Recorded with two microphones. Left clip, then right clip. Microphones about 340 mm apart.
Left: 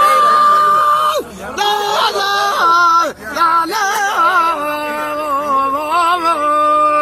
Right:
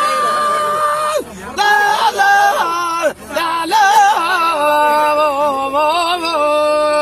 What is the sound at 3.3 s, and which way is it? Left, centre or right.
Music, right.